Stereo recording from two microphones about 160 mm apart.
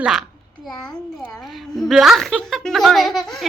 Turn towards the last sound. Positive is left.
turn(degrees=0)  # may be behind; listen again after turning